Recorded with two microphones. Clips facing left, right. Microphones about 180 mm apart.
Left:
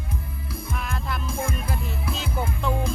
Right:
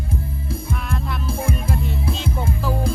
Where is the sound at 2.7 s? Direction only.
35° right (ahead or behind).